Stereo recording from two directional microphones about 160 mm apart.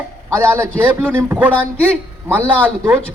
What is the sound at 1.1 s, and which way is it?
Speech, 15° right (ahead or behind).